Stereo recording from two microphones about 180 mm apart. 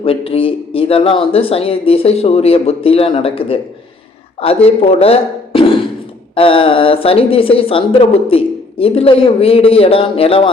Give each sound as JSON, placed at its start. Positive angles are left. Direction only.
{"t": 0.0, "sound": "a woman's voice", "side_deg": 30}